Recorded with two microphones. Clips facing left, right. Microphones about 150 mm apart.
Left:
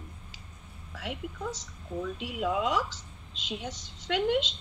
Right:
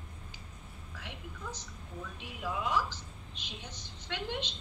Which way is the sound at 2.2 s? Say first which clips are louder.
Left 6 dB; 75° left (ahead or behind).